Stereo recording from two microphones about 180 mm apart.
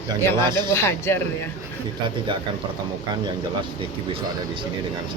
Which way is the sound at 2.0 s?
30° right (ahead or behind).